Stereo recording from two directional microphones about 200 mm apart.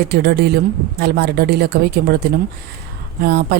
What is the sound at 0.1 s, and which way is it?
Speech, 55° right (ahead or behind).